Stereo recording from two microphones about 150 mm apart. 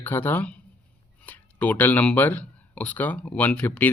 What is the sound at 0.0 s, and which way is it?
Speech, 15° left (ahead or behind).